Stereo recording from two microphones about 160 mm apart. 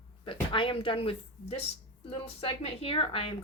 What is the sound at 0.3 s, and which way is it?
Speech, 30° left (ahead or behind).